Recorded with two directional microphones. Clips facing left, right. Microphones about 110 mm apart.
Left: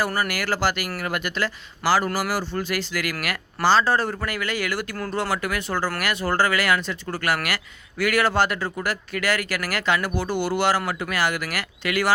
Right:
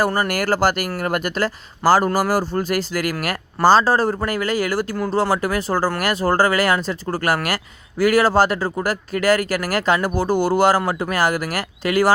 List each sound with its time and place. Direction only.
0.3 s speech: 45° right (ahead or behind)